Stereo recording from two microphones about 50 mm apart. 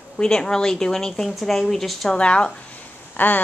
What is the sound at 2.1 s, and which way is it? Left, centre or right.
Speech, left.